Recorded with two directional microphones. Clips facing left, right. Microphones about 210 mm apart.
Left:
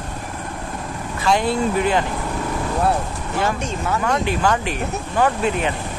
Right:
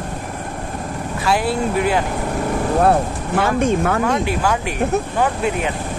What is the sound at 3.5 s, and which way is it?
Speech, 55° right (ahead or behind).